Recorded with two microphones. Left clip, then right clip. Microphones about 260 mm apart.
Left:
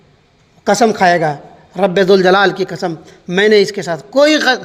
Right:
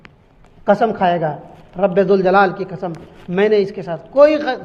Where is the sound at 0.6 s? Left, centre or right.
Left.